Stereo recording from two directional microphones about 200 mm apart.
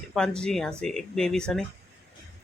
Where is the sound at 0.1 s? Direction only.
5° left (ahead or behind).